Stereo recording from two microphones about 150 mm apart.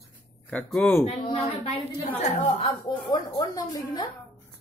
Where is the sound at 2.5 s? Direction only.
35° left (ahead or behind).